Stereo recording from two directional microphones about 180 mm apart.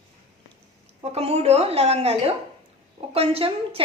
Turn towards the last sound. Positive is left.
turn(degrees=-30)  # may be behind; listen again after turning